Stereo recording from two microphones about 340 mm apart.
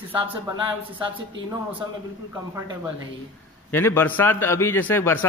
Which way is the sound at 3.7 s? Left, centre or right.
Centre.